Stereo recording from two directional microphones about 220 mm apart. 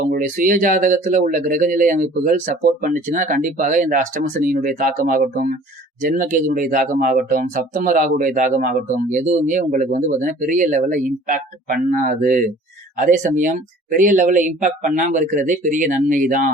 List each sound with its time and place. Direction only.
0.1 s speech: 40° right (ahead or behind)